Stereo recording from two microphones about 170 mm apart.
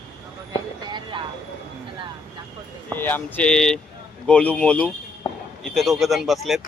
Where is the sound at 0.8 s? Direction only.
25° right (ahead or behind).